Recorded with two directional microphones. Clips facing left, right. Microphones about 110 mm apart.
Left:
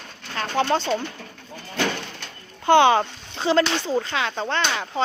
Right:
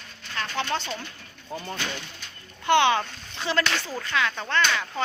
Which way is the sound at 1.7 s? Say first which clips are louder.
Left 8 dB; 75° left (ahead or behind).